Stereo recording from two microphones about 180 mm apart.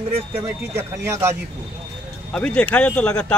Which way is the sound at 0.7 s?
15° right (ahead or behind).